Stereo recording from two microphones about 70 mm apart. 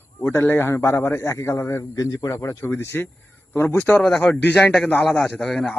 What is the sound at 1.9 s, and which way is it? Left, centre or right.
Speech, left.